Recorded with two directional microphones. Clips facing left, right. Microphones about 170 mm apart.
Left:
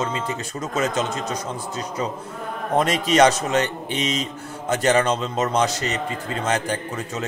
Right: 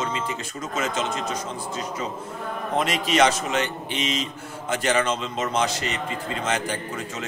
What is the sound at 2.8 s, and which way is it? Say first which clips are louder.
A man's voice: left 4 dB; 40° left (ahead or behind).